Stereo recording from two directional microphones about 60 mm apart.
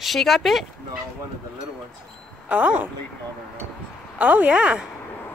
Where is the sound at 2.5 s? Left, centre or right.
Right.